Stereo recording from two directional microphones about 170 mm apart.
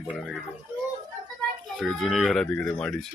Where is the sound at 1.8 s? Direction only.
Centre (ahead or behind).